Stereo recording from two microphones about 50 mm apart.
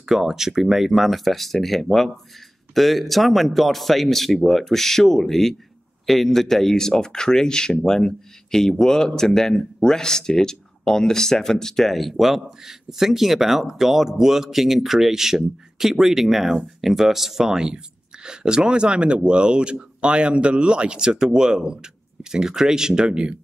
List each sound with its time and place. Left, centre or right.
0.0 s speech: centre